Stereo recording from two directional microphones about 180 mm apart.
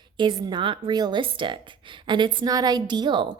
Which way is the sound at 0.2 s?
25° right (ahead or behind).